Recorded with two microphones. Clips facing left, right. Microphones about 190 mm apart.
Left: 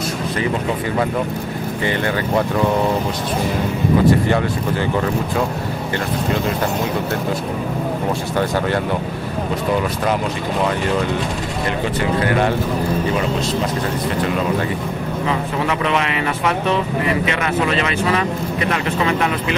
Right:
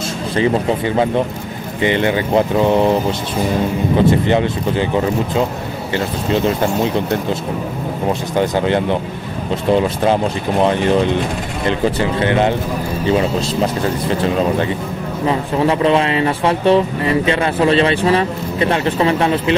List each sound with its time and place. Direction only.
1.8 s speech: 20° right (ahead or behind)
4.3 s speech: 20° right (ahead or behind)
8.4 s speech: 20° right (ahead or behind)
11.8 s speech: 25° right (ahead or behind)
15.2 s speech: 30° right (ahead or behind)